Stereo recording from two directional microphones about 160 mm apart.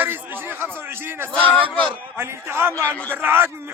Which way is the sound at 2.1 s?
15° right (ahead or behind).